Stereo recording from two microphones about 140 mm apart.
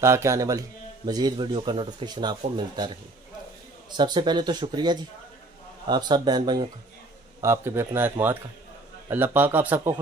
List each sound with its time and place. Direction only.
0.0 s a man's voice: 20° right (ahead or behind)
3.9 s speech: 30° right (ahead or behind)
7.4 s a man's voice: 20° right (ahead or behind)